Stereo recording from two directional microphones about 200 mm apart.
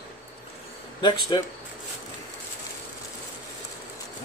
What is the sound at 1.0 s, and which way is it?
Speech, 20° left (ahead or behind).